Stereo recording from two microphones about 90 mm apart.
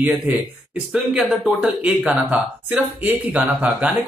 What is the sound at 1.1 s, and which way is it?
Speech, 15° right (ahead or behind).